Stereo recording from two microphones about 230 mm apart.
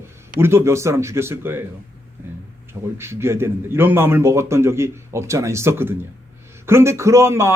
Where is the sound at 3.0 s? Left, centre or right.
Centre.